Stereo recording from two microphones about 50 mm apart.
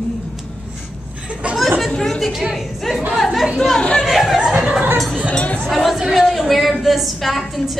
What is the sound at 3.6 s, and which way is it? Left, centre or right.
Speech, centre.